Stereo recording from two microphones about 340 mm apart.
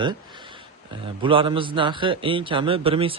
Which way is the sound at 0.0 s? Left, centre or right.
Centre.